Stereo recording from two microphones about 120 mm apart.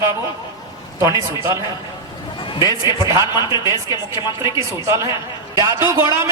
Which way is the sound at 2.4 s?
40° left (ahead or behind).